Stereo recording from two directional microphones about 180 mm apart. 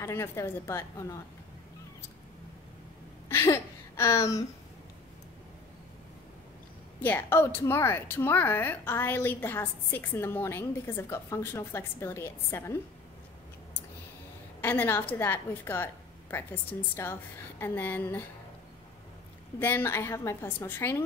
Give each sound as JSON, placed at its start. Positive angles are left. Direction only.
{"t": 0.0, "sound": "a woman's voice", "side_deg": 15}
{"t": 3.3, "sound": "a sound", "side_deg": 15}
{"t": 7.0, "sound": "a woman's voice", "side_deg": 10}
{"t": 14.6, "sound": "a woman's voice", "side_deg": 10}
{"t": 19.6, "sound": "a woman's voice", "side_deg": 10}